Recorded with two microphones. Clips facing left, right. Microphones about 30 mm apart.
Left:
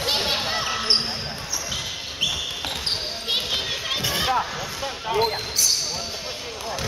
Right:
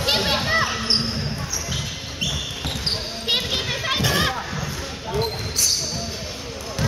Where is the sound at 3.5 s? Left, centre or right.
Right.